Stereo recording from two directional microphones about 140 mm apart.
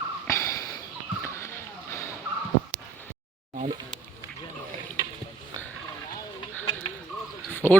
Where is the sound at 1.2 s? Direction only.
20° left (ahead or behind).